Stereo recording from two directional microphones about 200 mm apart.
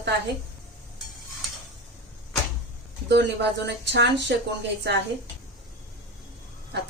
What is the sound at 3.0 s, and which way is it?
A woman's voice, 55° right (ahead or behind).